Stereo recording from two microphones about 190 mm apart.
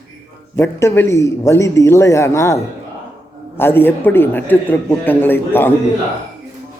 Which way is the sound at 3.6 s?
10° left (ahead or behind).